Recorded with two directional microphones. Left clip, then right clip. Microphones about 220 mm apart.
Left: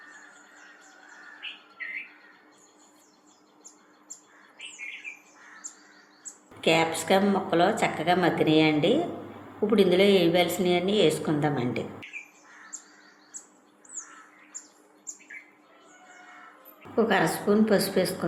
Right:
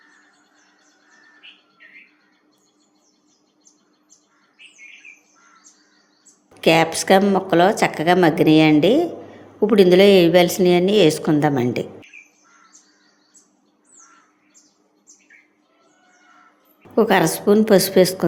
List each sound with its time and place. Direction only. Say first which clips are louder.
6.6 s a woman's voice: right 8 dB; 50° right (ahead or behind)
16.9 s a woman's voice: right 8 dB; 50° right (ahead or behind)